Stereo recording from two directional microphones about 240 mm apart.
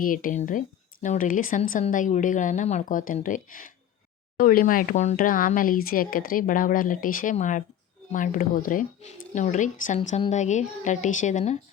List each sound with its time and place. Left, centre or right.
0.0 s speech: left